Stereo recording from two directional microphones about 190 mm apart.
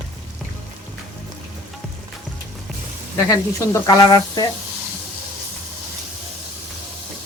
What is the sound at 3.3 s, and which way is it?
Speech, 20° left (ahead or behind).